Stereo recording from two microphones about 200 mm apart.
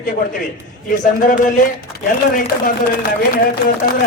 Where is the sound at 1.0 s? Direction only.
40° left (ahead or behind).